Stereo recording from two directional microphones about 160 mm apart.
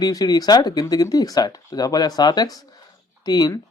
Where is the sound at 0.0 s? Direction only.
25° left (ahead or behind).